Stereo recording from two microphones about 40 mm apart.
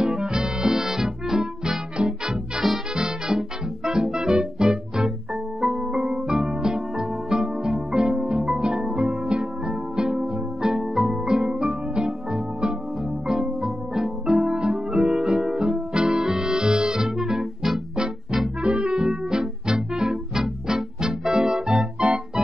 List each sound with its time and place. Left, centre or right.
0.0 s music: right
21.7 s music: right